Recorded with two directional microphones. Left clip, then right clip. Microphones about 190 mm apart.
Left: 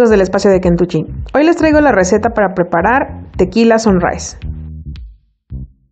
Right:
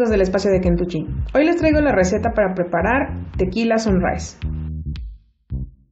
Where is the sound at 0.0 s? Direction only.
50° left (ahead or behind).